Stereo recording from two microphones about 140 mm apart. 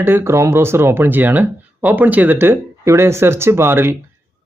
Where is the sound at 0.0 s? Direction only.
15° right (ahead or behind).